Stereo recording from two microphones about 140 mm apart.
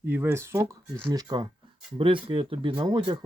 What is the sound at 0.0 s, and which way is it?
Speech, 15° right (ahead or behind).